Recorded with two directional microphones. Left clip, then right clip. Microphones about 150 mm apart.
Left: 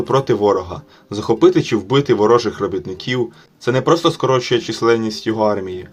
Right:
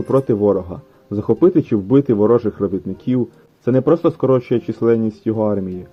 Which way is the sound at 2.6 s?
5° right (ahead or behind).